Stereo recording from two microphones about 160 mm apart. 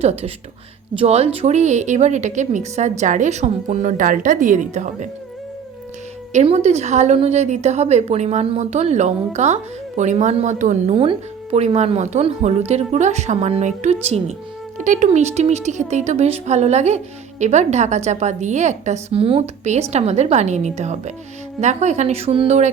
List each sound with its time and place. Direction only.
0.0 s speech: 40° right (ahead or behind)
6.3 s speech: 40° right (ahead or behind)